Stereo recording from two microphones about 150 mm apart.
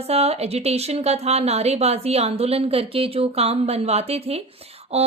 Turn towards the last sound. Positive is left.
turn(degrees=-45)  # may be behind; listen again after turning